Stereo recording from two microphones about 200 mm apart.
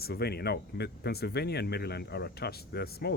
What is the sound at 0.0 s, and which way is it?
Speech, 50° left (ahead or behind).